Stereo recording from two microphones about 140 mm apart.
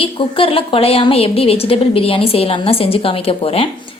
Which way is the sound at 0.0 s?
40° left (ahead or behind).